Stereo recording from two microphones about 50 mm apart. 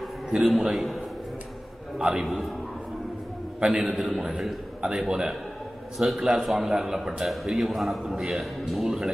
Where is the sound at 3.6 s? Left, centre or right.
Centre.